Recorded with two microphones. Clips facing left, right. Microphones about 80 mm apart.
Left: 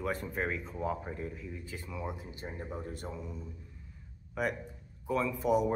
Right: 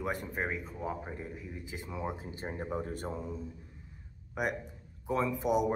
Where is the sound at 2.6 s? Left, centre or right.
Right.